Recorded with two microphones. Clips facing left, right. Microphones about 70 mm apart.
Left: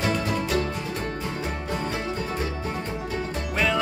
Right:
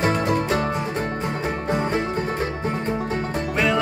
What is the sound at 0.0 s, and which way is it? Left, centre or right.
Music, right.